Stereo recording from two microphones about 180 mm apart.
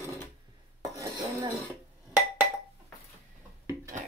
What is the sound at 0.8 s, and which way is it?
Cutlery, 20° right (ahead or behind).